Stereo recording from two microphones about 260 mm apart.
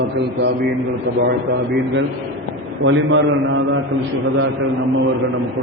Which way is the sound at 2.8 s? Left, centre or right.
Right.